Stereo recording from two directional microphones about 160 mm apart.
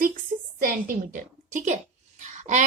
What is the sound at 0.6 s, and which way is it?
A woman's voice, 55° right (ahead or behind).